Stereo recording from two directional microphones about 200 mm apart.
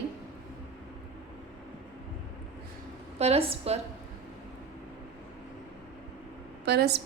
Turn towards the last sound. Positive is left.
turn(degrees=-55)  # may be behind; listen again after turning